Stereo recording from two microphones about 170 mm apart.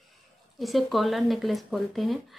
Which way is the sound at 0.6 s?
Centre (ahead or behind).